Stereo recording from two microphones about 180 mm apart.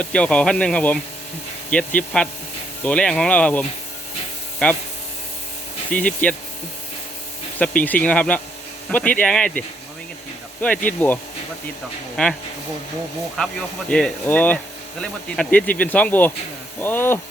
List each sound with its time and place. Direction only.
0.0 s speech: 5° left (ahead or behind)
5.9 s speech: 45° left (ahead or behind)
7.6 s speech: 5° left (ahead or behind)
13.4 s speech: 5° left (ahead or behind)